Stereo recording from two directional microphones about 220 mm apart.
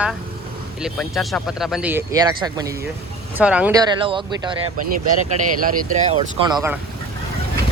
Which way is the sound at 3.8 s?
20° right (ahead or behind).